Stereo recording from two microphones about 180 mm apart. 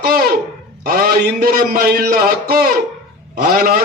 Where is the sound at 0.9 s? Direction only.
60° right (ahead or behind).